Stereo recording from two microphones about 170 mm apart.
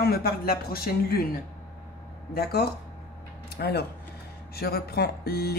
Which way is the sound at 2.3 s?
65° left (ahead or behind).